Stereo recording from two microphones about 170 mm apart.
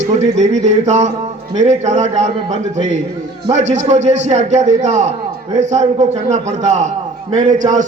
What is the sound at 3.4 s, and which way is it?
A man's voice, 45° right (ahead or behind).